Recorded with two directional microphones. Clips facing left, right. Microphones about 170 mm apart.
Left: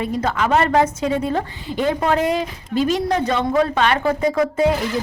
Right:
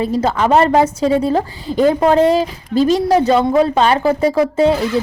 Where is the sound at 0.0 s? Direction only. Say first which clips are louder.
Right 5 dB; 30° right (ahead or behind).